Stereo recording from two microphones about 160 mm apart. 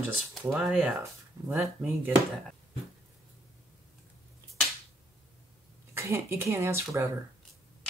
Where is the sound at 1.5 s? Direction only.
15° right (ahead or behind).